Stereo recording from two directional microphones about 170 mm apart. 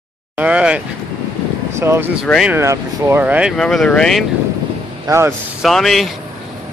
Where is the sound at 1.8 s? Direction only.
15° right (ahead or behind).